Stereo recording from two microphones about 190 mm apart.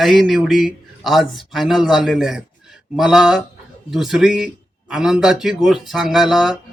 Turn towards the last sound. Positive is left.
turn(degrees=0)  # may be behind; listen again after turning